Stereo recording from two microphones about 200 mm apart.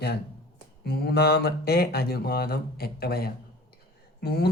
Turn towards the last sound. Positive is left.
turn(degrees=55)  # may be behind; listen again after turning